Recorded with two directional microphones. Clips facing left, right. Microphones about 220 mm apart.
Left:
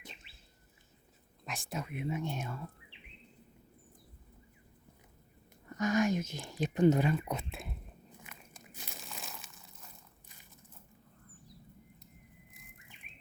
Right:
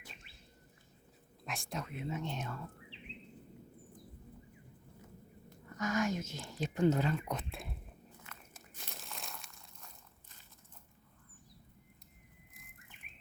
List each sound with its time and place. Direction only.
1.5 s speech: centre (ahead or behind)
5.6 s speech: 20° left (ahead or behind)
8.3 s biting: 15° left (ahead or behind)
8.7 s crumpling: centre (ahead or behind)
12.5 s car alarm: centre (ahead or behind)